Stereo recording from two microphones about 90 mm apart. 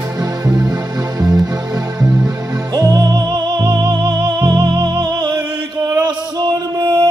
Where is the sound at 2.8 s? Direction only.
50° right (ahead or behind).